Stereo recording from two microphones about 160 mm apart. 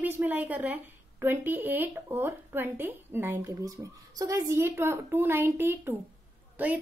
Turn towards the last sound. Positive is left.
turn(degrees=-10)  # may be behind; listen again after turning